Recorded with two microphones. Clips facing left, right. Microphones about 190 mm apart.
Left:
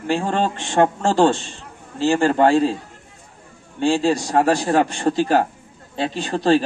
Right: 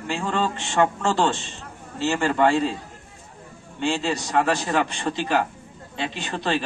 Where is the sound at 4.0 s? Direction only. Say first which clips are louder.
Left 4 dB; 50° left (ahead or behind).